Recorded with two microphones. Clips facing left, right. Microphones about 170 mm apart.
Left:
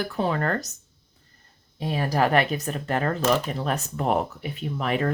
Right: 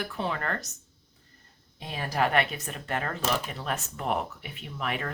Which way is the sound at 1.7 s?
40° left (ahead or behind).